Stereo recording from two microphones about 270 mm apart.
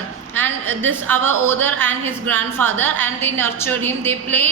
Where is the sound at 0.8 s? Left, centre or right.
Right.